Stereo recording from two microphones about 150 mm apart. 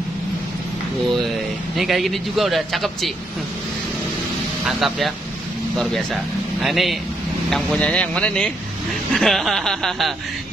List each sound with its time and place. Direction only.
1.8 s a man's voice: centre (ahead or behind)
4.6 s a man's voice: centre (ahead or behind)